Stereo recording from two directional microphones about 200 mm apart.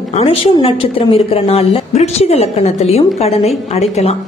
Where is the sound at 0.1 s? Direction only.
30° left (ahead or behind).